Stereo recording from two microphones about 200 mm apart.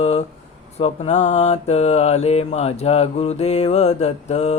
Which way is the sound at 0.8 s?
30° left (ahead or behind).